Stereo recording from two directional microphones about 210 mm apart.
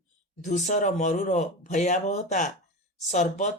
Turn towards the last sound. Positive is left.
turn(degrees=35)  # may be behind; listen again after turning